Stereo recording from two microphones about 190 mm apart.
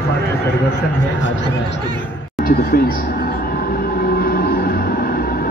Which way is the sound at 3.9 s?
50° left (ahead or behind).